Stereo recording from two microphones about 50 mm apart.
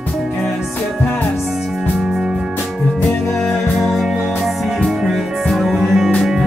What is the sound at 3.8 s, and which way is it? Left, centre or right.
Music, centre.